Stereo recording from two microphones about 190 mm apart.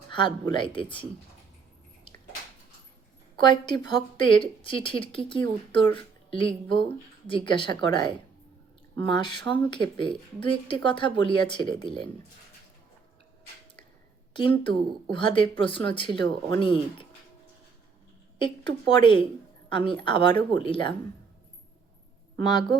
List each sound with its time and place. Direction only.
0.1 s speech: 25° left (ahead or behind)
3.3 s speech: 25° left (ahead or behind)
15.1 s speech: 25° left (ahead or behind)
18.3 s speech: 25° left (ahead or behind)
22.4 s speech: 25° left (ahead or behind)